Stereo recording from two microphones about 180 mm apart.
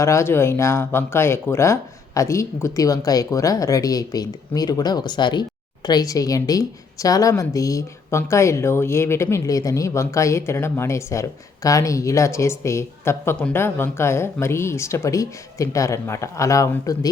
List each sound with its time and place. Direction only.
0.0 s speech: 15° left (ahead or behind)